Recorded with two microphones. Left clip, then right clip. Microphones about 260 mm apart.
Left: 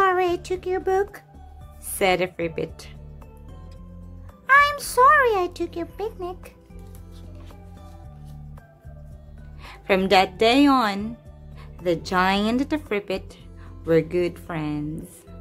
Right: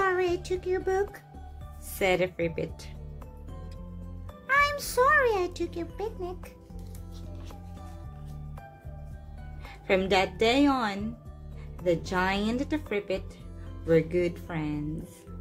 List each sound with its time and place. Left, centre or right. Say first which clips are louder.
0.0 s a child's voice: left 6 dB; centre
4.5 s a child's voice: left 8 dB; centre
9.7 s a woman's voice: left 6 dB; centre